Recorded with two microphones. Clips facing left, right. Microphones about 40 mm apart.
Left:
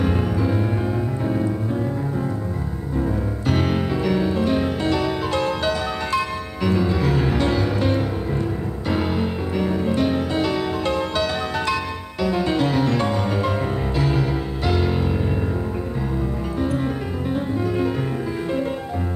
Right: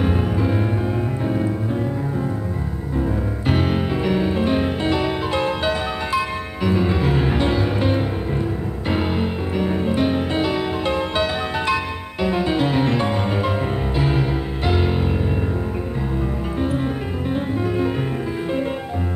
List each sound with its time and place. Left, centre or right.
0.0 s music: centre
3.4 s music: centre